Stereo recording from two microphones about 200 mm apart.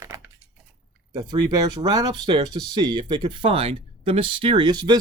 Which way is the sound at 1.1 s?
20° right (ahead or behind).